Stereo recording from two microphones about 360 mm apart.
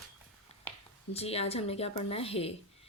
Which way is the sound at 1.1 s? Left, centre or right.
Centre.